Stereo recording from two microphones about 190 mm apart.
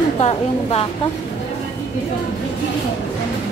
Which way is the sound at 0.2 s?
30° left (ahead or behind).